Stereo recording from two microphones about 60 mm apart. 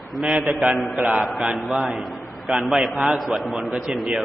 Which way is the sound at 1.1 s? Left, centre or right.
Centre.